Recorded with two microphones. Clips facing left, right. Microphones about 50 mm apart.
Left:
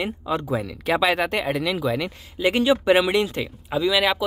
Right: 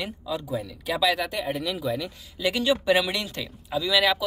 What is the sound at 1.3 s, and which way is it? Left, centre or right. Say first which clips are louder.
Speech: left 5 dB; left.